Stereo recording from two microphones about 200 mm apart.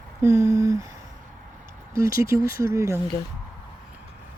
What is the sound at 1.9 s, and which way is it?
Speech, 15° right (ahead or behind).